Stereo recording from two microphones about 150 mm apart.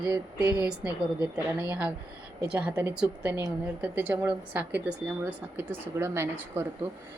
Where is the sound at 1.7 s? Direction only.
10° right (ahead or behind).